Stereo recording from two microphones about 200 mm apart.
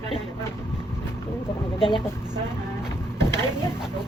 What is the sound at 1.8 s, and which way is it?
Speech, 25° left (ahead or behind).